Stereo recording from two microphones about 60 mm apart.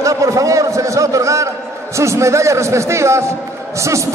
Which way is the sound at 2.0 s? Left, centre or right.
Right.